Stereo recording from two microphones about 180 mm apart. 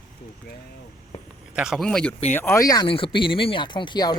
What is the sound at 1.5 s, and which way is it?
Speech, 5° right (ahead or behind).